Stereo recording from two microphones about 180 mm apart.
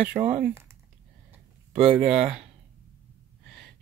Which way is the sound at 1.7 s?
5° right (ahead or behind).